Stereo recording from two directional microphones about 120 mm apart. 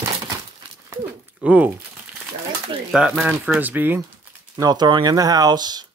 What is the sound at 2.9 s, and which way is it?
Speech, 5° right (ahead or behind).